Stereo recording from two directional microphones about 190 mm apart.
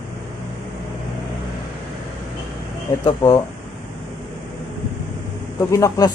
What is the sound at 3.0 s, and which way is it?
Speech, 20° left (ahead or behind).